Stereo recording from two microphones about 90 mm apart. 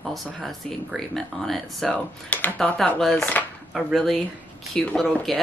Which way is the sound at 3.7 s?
Centre (ahead or behind).